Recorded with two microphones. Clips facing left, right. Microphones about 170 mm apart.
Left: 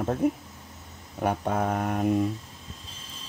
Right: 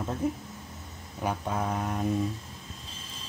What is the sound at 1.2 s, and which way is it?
Speech, 55° left (ahead or behind).